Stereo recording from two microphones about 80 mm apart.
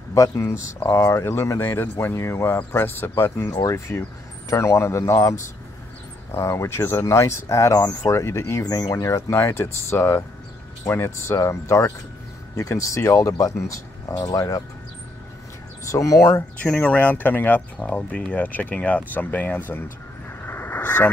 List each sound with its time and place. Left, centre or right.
0.1 s speech: left
3.5 s speech: left
8.9 s speech: left
15.9 s speech: left
16.5 s speech: centre
20.4 s vehicle: left